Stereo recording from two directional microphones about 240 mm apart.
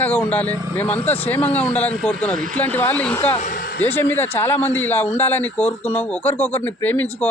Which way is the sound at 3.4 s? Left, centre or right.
Left.